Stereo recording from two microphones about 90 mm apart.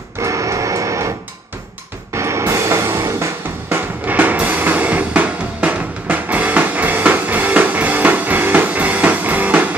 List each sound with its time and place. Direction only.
0.2 s music: 35° right (ahead or behind)
2.1 s music: 30° right (ahead or behind)
3.6 s music: 20° right (ahead or behind)